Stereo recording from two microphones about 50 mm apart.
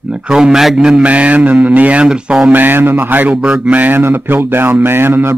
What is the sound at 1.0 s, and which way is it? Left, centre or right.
Speech, right.